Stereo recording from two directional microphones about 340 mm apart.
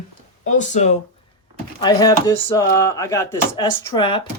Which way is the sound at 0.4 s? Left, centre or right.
Left.